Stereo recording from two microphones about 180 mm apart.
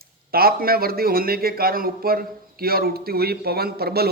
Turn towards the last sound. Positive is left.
turn(degrees=-60)  # may be behind; listen again after turning